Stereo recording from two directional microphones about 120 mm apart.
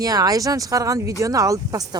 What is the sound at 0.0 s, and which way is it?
Speech, 30° right (ahead or behind).